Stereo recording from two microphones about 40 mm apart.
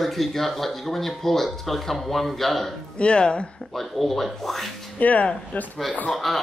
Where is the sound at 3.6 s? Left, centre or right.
Centre.